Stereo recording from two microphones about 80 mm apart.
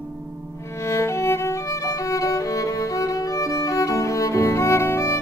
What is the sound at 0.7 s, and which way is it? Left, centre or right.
Music, left.